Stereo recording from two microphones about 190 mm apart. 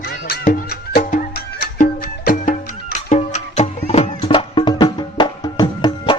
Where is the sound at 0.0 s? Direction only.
50° left (ahead or behind).